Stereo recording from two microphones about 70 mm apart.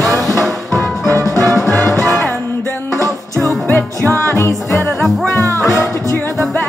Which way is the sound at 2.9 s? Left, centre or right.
Right.